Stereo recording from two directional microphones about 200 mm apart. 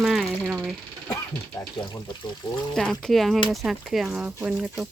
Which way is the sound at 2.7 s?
5° left (ahead or behind).